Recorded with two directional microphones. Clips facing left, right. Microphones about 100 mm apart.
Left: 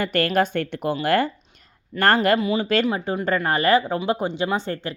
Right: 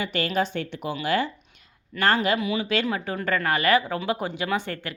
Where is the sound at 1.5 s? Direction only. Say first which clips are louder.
Left 2 dB; 45° left (ahead or behind).